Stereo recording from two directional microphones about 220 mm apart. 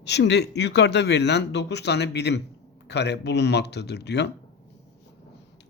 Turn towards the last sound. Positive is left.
turn(degrees=50)  # may be behind; listen again after turning